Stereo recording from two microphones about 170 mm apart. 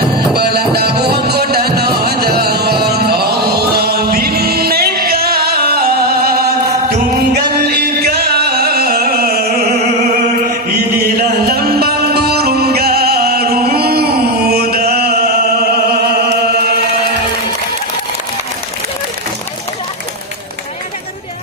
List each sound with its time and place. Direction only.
0.3 s music: 70° right (ahead or behind)
7.6 s music: 70° right (ahead or behind)
11.2 s music: 65° right (ahead or behind)